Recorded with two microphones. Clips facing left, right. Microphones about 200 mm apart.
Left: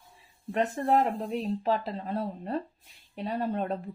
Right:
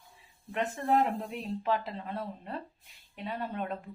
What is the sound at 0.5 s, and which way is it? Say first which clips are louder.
A woman's voice: left 3 dB; 40° left (ahead or behind).